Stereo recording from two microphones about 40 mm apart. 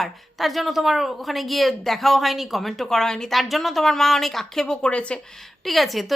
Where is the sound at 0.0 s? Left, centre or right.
Centre.